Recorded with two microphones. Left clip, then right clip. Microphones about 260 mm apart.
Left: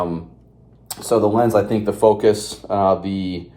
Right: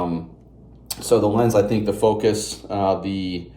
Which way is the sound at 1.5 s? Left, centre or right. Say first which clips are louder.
Left 1 dB; centre.